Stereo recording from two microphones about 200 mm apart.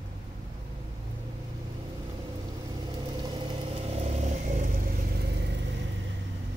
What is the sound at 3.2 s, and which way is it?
Vehicle, 25° right (ahead or behind).